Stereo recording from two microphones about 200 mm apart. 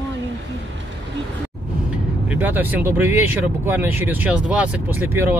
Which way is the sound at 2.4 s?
10° right (ahead or behind).